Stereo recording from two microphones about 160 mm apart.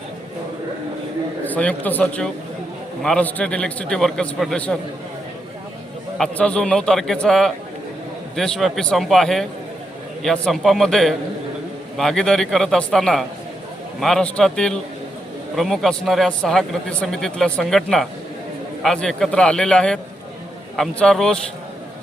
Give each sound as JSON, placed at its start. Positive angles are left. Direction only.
{"t": 1.5, "sound": "a man's voice", "side_deg": 10}
{"t": 6.1, "sound": "speech", "side_deg": 5}